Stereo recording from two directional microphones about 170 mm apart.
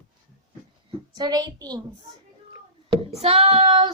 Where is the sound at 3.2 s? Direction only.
35° right (ahead or behind).